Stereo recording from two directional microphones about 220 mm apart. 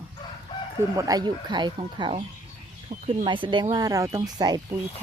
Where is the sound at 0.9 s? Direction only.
15° right (ahead or behind).